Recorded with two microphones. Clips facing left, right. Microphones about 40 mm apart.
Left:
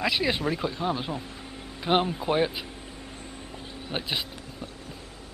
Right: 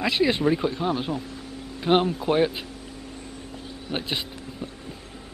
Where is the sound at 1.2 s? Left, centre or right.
Left.